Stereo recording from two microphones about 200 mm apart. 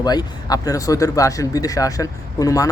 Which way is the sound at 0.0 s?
20° left (ahead or behind).